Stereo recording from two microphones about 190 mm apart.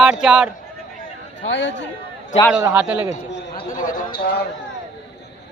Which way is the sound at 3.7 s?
40° left (ahead or behind).